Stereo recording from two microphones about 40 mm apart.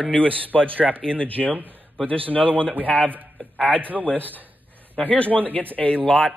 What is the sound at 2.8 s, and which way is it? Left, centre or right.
Speech, left.